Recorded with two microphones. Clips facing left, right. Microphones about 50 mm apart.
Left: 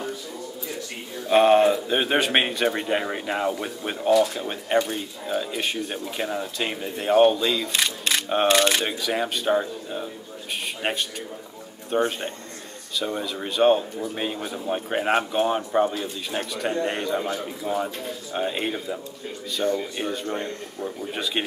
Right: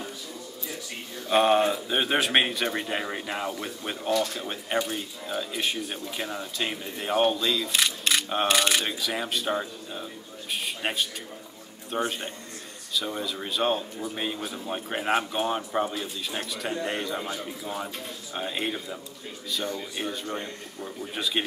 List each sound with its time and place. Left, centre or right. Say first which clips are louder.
1.3 s speech: left 5 dB; centre
8.8 s speech: left 4 dB; centre
11.9 s speech: left 5 dB; centre